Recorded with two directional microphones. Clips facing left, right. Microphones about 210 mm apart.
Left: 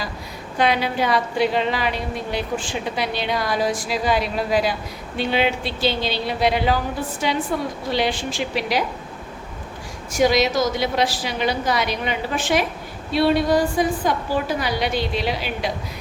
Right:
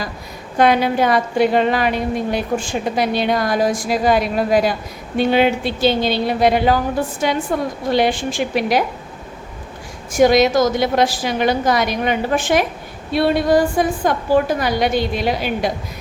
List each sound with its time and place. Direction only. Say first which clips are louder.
0.6 s a woman's voice: right 6 dB; 50° right (ahead or behind)
10.1 s a woman's voice: right 5 dB; 50° right (ahead or behind)